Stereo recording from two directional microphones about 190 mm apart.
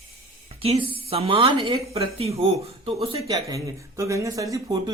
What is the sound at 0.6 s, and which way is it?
A woman's voice, 30° right (ahead or behind).